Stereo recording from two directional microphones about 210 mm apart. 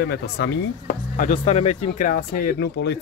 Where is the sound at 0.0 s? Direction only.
50° left (ahead or behind).